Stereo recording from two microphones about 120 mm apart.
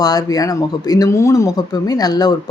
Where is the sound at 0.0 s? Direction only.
30° left (ahead or behind).